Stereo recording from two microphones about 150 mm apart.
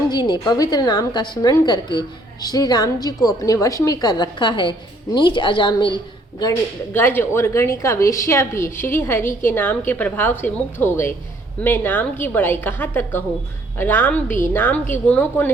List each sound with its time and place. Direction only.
0.1 s a woman's voice: 30° left (ahead or behind)
6.9 s a woman's voice: 15° left (ahead or behind)